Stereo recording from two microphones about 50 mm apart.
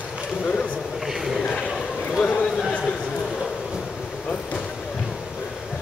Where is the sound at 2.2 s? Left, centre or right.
Left.